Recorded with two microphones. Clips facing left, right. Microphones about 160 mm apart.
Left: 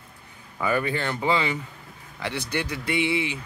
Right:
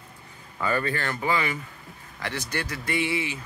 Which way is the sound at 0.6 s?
15° left (ahead or behind).